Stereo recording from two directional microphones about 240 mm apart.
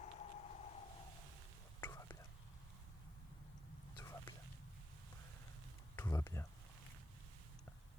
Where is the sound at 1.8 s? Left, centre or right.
Centre.